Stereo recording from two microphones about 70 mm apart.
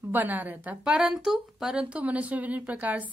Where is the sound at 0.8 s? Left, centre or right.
Centre.